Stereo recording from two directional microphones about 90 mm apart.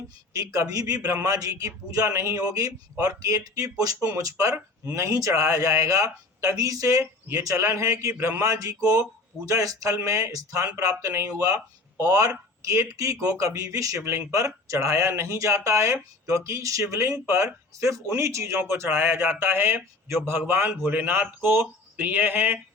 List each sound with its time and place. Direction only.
0.3 s speech: 40° right (ahead or behind); by 22.5 s 20° right (ahead or behind)